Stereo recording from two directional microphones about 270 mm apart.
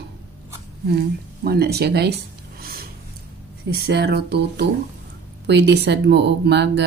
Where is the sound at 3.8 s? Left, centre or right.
Right.